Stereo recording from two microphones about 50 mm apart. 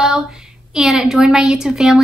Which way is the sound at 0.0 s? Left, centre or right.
Centre.